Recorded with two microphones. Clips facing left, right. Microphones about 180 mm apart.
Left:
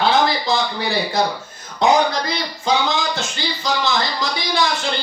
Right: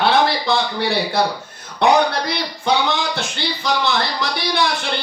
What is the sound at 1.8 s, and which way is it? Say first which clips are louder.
Speech: right 1 dB; 60° right (ahead or behind).